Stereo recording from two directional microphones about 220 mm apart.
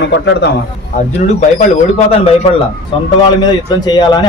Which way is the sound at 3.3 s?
20° left (ahead or behind).